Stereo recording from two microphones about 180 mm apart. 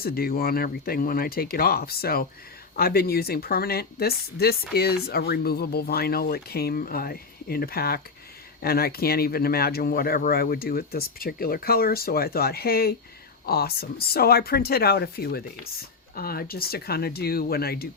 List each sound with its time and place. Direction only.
0.0 s speech: 55° left (ahead or behind)